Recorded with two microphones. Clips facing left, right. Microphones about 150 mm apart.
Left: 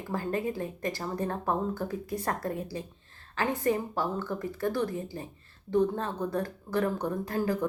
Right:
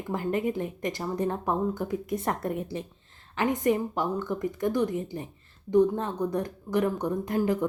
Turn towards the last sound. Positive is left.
turn(degrees=-20)  # may be behind; listen again after turning